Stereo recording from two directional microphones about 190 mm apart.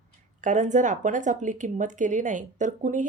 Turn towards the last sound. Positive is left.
turn(degrees=-40)  # may be behind; listen again after turning